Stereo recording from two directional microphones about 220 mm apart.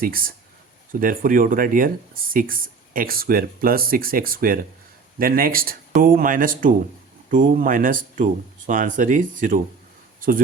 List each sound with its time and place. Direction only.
0.0 s speech: 40° right (ahead or behind)